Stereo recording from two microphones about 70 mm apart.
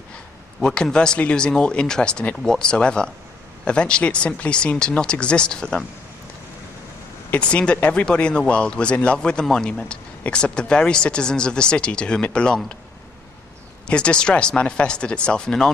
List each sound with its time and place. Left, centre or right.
0.6 s speech: centre
7.3 s speech: centre
13.8 s speech: centre